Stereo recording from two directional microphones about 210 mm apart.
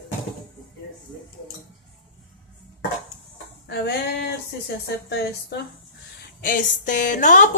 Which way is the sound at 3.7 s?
50° left (ahead or behind).